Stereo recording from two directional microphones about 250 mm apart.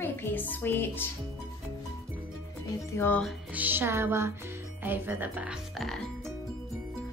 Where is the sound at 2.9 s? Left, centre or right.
Centre.